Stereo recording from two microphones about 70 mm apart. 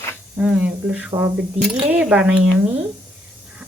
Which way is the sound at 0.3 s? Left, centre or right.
Centre.